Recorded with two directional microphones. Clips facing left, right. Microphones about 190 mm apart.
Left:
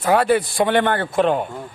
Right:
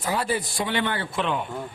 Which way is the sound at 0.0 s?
65° left (ahead or behind).